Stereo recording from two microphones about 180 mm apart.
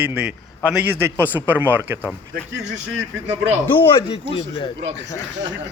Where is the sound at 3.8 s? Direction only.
30° left (ahead or behind).